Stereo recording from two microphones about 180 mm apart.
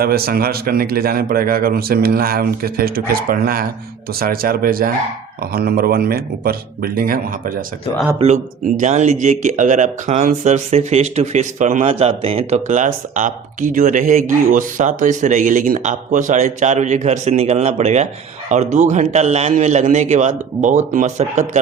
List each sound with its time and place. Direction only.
0.0 s a man's voice: 55° right (ahead or behind)
8.2 s speech: 40° right (ahead or behind)